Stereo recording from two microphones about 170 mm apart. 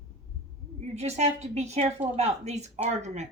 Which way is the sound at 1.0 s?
40° right (ahead or behind).